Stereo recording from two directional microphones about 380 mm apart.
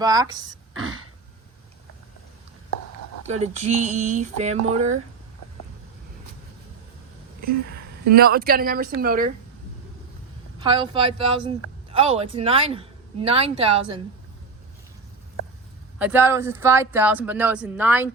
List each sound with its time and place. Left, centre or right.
0.0 s speech: centre
0.7 s throat clearing: right
3.2 s speech: centre
8.1 s speech: right
10.6 s speech: centre
16.0 s speech: centre